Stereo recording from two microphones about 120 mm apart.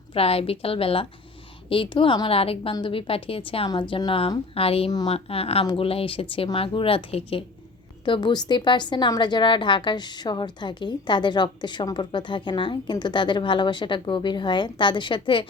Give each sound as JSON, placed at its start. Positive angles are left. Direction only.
{"t": 0.1, "sound": "speech", "side_deg": 55}
{"t": 8.0, "sound": "a woman's voice", "side_deg": 40}